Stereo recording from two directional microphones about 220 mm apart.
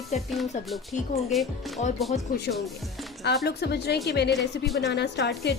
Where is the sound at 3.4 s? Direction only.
50° left (ahead or behind).